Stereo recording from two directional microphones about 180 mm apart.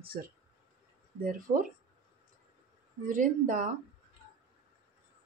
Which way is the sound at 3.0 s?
45° right (ahead or behind).